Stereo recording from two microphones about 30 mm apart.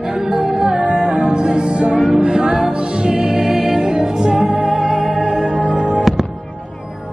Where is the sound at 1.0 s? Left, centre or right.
Right.